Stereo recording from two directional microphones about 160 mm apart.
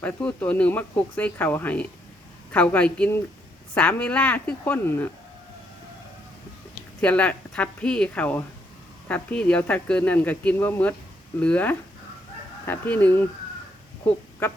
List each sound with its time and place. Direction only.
0.0 s speech: 10° left (ahead or behind)
7.0 s speech: 10° left (ahead or behind)
14.0 s a sound: 15° left (ahead or behind)